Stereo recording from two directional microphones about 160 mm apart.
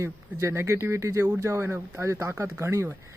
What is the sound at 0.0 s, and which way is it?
Speech, 20° right (ahead or behind).